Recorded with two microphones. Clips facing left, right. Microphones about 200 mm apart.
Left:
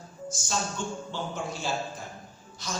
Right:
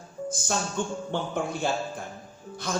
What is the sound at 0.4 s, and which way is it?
Speech, 55° right (ahead or behind).